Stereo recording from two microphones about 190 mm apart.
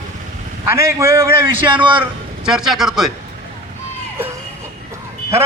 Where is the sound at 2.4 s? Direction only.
5° right (ahead or behind).